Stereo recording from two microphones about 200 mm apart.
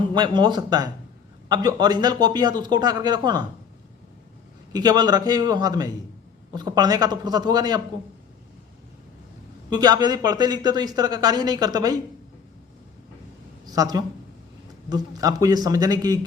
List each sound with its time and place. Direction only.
0.1 s speech: 20° right (ahead or behind)
4.7 s speech: 20° right (ahead or behind)
9.6 s speech: 20° right (ahead or behind)
13.7 s speech: 20° right (ahead or behind)